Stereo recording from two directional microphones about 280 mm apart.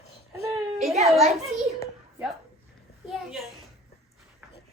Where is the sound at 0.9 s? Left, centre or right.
Right.